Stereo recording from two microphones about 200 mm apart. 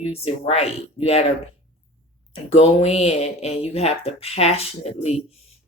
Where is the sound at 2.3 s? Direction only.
30° left (ahead or behind).